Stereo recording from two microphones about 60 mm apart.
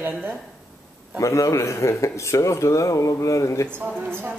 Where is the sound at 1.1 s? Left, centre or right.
Left.